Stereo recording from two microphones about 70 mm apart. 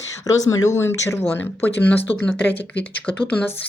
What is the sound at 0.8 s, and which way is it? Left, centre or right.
A woman's voice, left.